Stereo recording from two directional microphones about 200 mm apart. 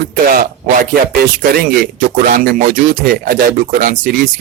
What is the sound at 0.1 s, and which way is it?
Speech, 45° right (ahead or behind).